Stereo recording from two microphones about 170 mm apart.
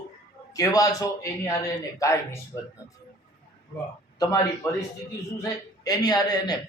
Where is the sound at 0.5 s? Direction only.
20° left (ahead or behind).